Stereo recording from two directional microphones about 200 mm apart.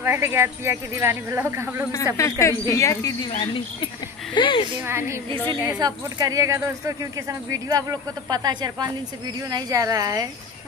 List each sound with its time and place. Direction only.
0.0 s speech: 10° right (ahead or behind)
2.1 s speech: 15° left (ahead or behind)
3.3 s speech: 25° left (ahead or behind)
4.8 s speech: 15° right (ahead or behind)